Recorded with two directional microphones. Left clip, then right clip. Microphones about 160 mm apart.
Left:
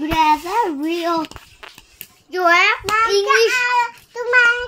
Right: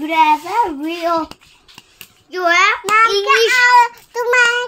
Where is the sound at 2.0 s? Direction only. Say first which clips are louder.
Left 1 dB; 10° right (ahead or behind).